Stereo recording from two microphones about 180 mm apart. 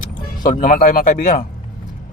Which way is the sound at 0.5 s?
50° left (ahead or behind).